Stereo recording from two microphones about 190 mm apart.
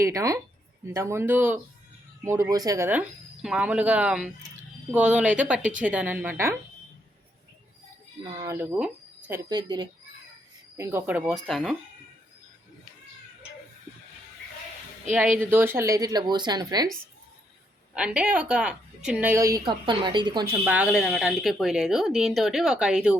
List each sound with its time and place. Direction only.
0.0 s speech: 15° right (ahead or behind)
8.4 s speech: 15° right (ahead or behind)
9.5 s a woman's voice: 25° right (ahead or behind)
10.8 s speech: 10° right (ahead or behind)
15.4 s a woman's voice: 10° right (ahead or behind)
17.9 s speech: 5° right (ahead or behind)
19.5 s a woman's voice: 25° right (ahead or behind)
20.7 s speech: 5° right (ahead or behind)